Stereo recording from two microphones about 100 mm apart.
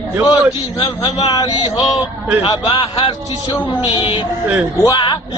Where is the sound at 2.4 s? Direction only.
55° left (ahead or behind).